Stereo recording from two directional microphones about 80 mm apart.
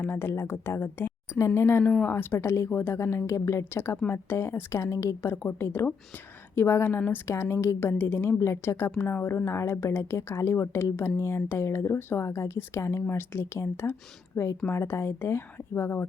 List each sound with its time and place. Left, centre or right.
0.0 s speech: left
1.8 s speech: centre
2.0 s a woman's voice: left